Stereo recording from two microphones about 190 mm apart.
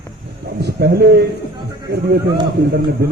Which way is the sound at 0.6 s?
55° right (ahead or behind).